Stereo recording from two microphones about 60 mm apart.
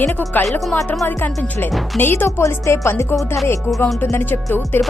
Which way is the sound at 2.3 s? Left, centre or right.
Left.